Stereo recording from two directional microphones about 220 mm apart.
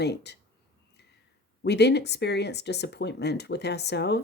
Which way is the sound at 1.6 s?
50° left (ahead or behind).